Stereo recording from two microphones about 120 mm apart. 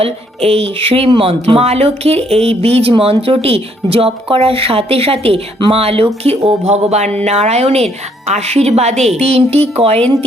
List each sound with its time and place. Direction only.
0.0 s speech: 50° right (ahead or behind)